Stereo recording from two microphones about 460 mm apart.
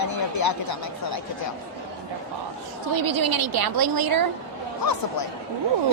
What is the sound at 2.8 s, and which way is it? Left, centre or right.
A woman's voice, right.